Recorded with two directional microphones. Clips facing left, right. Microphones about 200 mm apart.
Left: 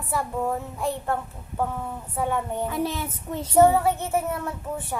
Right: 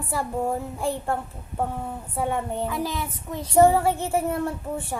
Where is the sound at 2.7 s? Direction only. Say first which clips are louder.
Left 1 dB; 25° left (ahead or behind).